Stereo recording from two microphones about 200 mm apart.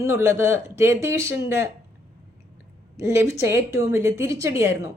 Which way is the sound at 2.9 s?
15° right (ahead or behind).